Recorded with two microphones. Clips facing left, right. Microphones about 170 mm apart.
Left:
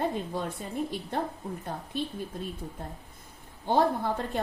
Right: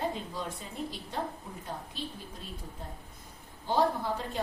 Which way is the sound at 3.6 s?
55° left (ahead or behind).